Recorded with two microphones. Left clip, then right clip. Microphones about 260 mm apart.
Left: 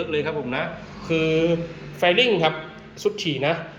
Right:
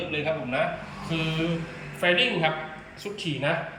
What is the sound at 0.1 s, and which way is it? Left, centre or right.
Speech, centre.